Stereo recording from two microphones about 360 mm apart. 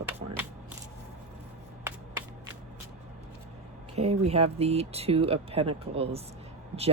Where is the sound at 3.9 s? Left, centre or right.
Centre.